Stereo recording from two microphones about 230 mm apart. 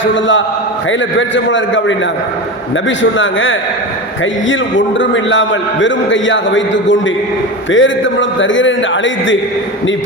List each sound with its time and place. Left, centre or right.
0.0 s a man's voice: left
1.5 s a man's voice: left
3.0 s a man's voice: left